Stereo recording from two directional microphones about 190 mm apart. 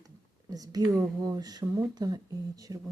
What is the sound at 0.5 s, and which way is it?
Speech, 20° right (ahead or behind).